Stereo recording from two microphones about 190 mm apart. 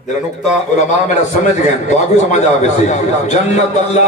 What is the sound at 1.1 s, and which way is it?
A man's voice, 40° left (ahead or behind).